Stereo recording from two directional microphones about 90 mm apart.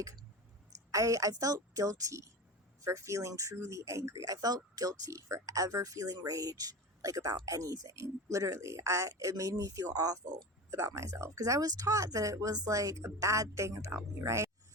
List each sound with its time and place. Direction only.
0.9 s speech: 40° right (ahead or behind)
10.7 s speech: 35° right (ahead or behind)